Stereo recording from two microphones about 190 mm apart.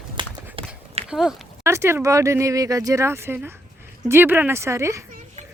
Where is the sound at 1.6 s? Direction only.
15° right (ahead or behind).